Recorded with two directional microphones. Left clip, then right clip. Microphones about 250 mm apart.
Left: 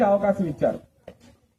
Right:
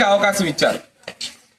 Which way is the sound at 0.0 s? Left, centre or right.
Centre.